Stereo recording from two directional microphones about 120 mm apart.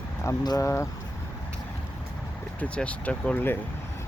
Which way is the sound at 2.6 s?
10° left (ahead or behind).